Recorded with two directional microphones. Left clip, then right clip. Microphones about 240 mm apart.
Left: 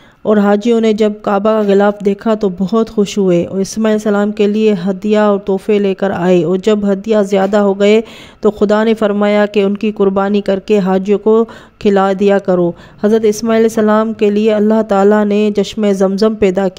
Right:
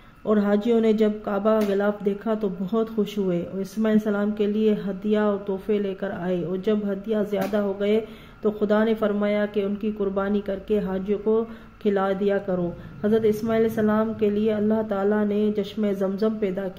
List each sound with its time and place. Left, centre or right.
0.3 s speech: left